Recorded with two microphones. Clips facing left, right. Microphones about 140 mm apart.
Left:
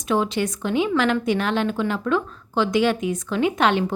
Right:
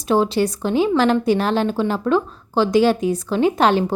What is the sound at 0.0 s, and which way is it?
A woman's voice, 35° right (ahead or behind).